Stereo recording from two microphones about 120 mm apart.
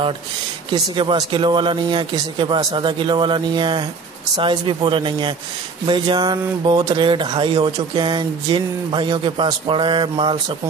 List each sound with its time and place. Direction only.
0.7 s speech: 40° right (ahead or behind)